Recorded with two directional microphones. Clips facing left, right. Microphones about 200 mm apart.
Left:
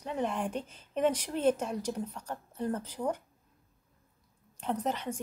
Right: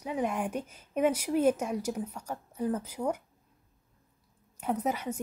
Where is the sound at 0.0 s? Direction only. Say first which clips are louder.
Right 2 dB; 10° right (ahead or behind).